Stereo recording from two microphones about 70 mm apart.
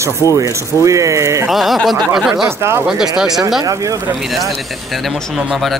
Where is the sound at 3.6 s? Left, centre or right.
Right.